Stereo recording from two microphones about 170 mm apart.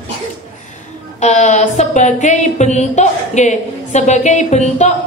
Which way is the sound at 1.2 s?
45° left (ahead or behind).